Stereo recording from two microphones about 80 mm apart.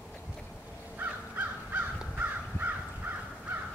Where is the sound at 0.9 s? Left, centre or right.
Right.